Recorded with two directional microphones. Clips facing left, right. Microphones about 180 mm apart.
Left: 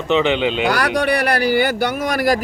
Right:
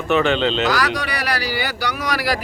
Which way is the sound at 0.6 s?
60° left (ahead or behind).